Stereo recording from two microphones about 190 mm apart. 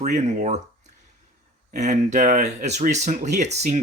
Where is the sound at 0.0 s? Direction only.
40° right (ahead or behind).